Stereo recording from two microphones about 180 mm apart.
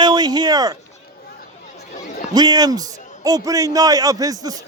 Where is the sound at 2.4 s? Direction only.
20° right (ahead or behind).